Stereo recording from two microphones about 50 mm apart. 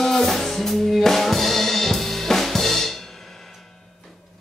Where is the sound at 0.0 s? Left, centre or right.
Centre.